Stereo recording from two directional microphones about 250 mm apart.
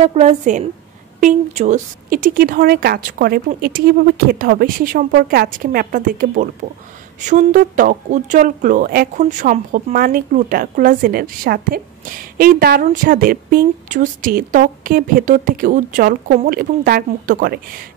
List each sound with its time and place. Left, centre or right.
0.0 s a woman's voice: right